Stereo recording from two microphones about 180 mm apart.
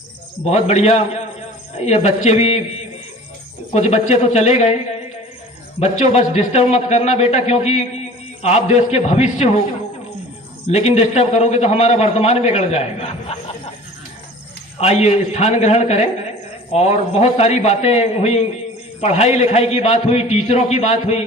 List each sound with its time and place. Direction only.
0.4 s a man's voice: 35° left (ahead or behind)
3.8 s a man's voice: 35° left (ahead or behind)
5.8 s a man's voice: 40° left (ahead or behind)
10.7 s a man's voice: 35° left (ahead or behind)
14.8 s a man's voice: 35° left (ahead or behind)